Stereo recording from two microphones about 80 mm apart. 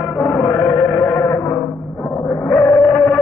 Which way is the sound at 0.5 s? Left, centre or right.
Centre.